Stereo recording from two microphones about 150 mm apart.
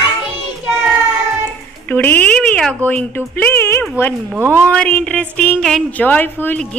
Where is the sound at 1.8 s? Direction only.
10° left (ahead or behind).